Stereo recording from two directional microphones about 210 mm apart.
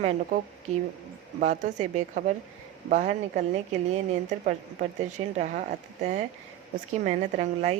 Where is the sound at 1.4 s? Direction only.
35° right (ahead or behind).